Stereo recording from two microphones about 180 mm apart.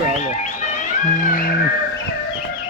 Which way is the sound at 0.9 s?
50° left (ahead or behind).